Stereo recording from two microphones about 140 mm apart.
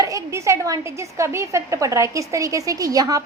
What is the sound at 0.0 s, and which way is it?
A woman's voice, 20° right (ahead or behind).